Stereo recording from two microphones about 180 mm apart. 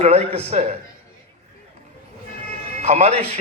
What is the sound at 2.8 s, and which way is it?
Speech, 35° right (ahead or behind).